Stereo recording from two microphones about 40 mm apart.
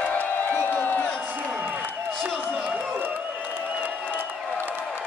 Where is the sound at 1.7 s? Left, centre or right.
Right.